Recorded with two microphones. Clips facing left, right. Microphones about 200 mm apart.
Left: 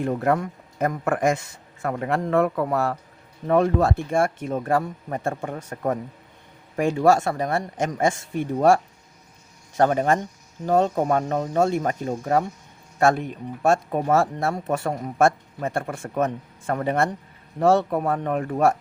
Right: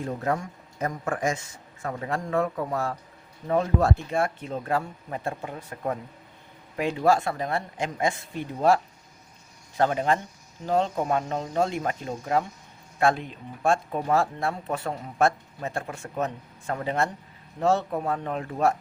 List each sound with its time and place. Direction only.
0.0 s a man's voice: 60° left (ahead or behind)
9.7 s speech: 45° left (ahead or behind)